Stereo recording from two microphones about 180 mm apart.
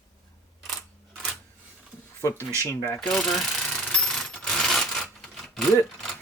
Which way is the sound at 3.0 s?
Centre (ahead or behind).